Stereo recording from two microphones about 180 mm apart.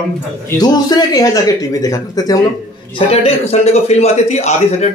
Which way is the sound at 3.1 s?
35° left (ahead or behind).